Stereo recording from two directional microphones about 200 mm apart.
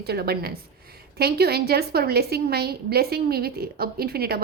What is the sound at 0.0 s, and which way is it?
A woman's voice, 50° right (ahead or behind).